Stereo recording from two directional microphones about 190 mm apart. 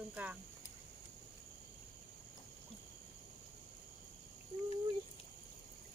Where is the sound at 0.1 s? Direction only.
10° right (ahead or behind).